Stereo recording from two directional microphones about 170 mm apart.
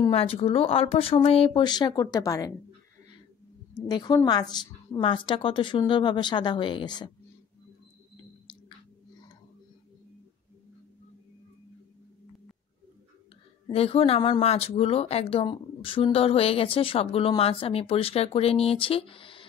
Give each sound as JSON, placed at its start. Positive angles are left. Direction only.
{"t": 0.1, "sound": "speech", "side_deg": 35}
{"t": 3.9, "sound": "a woman's voice", "side_deg": 25}
{"t": 13.7, "sound": "speech", "side_deg": 35}